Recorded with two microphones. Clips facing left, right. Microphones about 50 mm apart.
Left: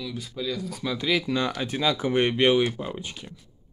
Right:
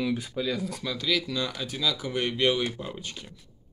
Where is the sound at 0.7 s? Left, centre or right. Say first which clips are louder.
Left 3 dB; centre.